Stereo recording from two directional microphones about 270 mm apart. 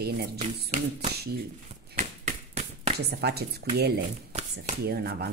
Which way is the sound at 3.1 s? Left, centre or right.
Right.